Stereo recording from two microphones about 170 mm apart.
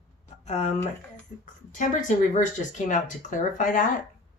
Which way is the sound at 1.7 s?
50° left (ahead or behind).